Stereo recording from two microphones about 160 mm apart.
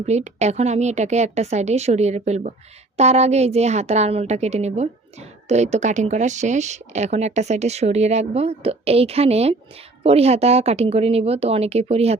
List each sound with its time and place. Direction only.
0.0 s speech: 45° right (ahead or behind)